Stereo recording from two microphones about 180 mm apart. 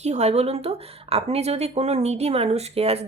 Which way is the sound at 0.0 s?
40° right (ahead or behind).